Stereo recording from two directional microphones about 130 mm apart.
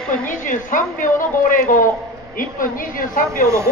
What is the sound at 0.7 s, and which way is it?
Speech, 90° left.